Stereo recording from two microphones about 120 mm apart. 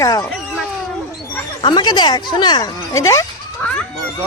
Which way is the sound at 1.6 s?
40° left (ahead or behind).